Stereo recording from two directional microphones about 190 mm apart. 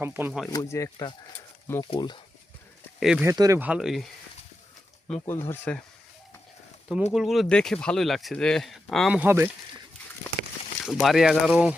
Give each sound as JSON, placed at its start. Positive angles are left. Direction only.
{"t": 0.0, "sound": "speech", "side_deg": -10}
{"t": 0.5, "sound": "speech", "side_deg": 15}
{"t": 1.9, "sound": "speech", "side_deg": 25}
{"t": 3.0, "sound": "speech", "side_deg": -5}
{"t": 3.2, "sound": "speech", "side_deg": -15}
{"t": 3.7, "sound": "speech", "side_deg": -5}
{"t": 5.2, "sound": "speech", "side_deg": 10}
{"t": 7.1, "sound": "speech", "side_deg": 0}
{"t": 10.8, "sound": "speech", "side_deg": 0}